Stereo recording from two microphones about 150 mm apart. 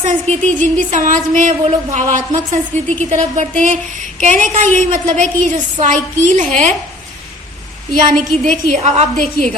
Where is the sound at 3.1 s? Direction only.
55° right (ahead or behind).